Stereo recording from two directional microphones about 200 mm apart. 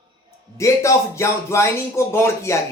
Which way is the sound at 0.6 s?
15° left (ahead or behind).